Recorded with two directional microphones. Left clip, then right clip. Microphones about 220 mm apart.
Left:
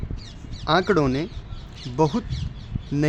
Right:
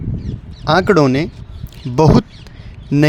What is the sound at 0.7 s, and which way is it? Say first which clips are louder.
Speech: right 8 dB; 35° right (ahead or behind).